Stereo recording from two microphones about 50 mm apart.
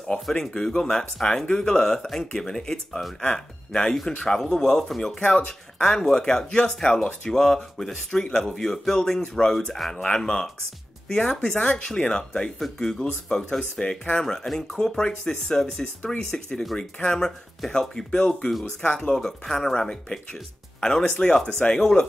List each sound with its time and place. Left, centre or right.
0.0 s speech: centre